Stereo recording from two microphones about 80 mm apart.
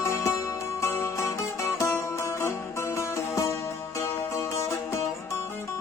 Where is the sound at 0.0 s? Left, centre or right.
Left.